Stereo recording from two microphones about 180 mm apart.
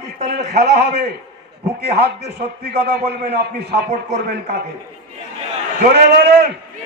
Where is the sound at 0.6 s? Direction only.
65° right (ahead or behind).